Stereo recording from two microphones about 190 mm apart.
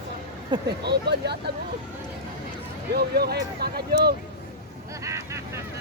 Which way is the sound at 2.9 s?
55° right (ahead or behind).